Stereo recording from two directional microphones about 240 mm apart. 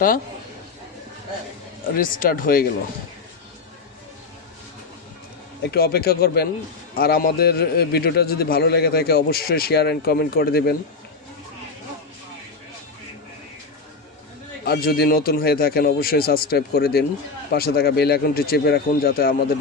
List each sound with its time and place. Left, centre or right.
2.0 s a man's voice: left
5.7 s a man's voice: left
14.6 s a man's voice: left